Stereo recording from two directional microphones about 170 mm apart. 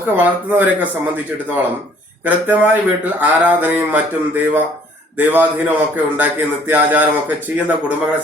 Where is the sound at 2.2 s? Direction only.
10° right (ahead or behind).